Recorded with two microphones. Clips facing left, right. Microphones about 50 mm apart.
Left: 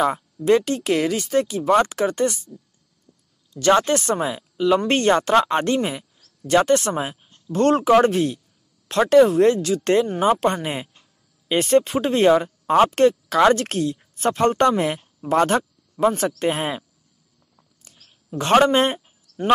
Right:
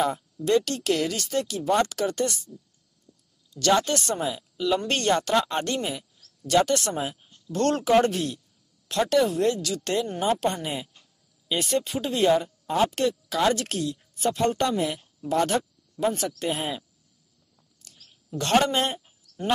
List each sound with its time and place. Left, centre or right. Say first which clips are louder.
0.0 s speech: left 5 dB; left
0.5 s speech: left 5 dB; left
3.1 s a sound: left 1 dB; left
3.7 s speech: left 5 dB; left
7.5 s speech: left 5 dB; left
10.0 s speech: left 7 dB; left
10.4 s speech: left 5 dB; left
18.4 s a man's voice: left 6 dB; left